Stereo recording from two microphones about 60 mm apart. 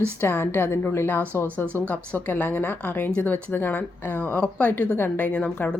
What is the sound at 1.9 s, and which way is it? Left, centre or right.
Speech, left.